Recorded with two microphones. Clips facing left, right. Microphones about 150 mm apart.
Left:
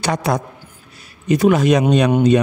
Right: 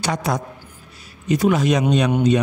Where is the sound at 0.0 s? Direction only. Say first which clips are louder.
Left 3 dB; 60° left (ahead or behind).